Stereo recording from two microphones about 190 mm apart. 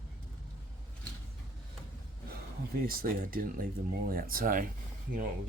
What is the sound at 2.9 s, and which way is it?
Speech, 50° right (ahead or behind).